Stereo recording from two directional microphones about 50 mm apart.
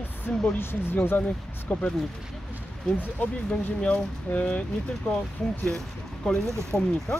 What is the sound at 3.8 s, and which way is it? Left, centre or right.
Speech, left.